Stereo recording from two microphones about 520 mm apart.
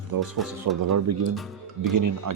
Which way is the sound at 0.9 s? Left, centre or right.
Right.